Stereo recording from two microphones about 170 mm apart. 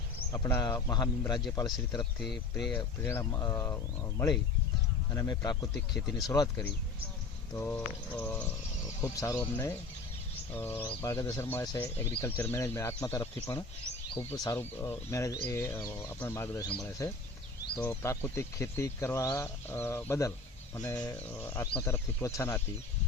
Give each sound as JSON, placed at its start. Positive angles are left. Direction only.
{"t": 0.3, "sound": "a man's voice", "side_deg": 25}
{"t": 2.6, "sound": "a man's voice", "side_deg": 10}
{"t": 5.7, "sound": "speech", "side_deg": 0}
{"t": 6.2, "sound": "a man's voice", "side_deg": 25}